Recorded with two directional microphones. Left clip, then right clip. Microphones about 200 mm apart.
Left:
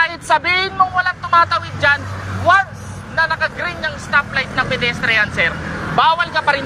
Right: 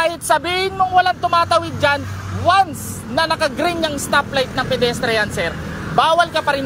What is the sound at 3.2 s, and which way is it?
Speech, 40° right (ahead or behind).